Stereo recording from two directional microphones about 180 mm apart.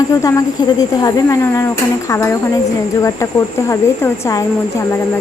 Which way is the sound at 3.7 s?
15° left (ahead or behind).